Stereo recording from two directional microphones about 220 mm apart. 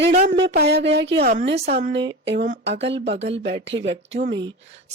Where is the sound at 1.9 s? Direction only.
55° right (ahead or behind).